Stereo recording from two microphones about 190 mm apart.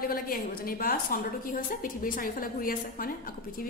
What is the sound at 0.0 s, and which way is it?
A woman's voice, 50° left (ahead or behind).